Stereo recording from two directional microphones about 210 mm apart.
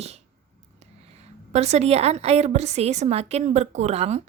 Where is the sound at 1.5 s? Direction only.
30° right (ahead or behind).